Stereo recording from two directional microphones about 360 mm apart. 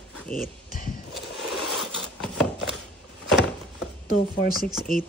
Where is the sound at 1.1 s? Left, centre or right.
Centre.